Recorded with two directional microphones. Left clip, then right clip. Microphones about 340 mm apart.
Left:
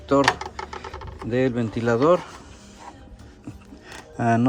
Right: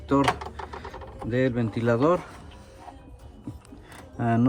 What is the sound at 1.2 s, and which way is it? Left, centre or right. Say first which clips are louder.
Speech: left 3 dB; centre.